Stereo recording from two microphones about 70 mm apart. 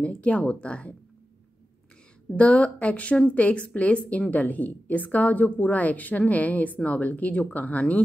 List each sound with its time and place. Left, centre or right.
0.0 s speech: centre
2.3 s a woman's voice: centre